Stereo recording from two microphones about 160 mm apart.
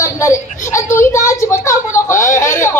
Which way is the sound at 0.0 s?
20° left (ahead or behind).